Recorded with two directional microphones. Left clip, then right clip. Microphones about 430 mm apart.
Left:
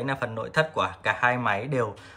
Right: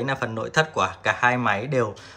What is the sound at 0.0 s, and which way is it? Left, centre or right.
Speech, centre.